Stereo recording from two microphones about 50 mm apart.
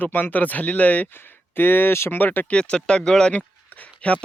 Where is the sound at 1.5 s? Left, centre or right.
Left.